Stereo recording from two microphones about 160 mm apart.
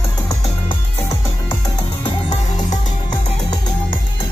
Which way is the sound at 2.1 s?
40° left (ahead or behind).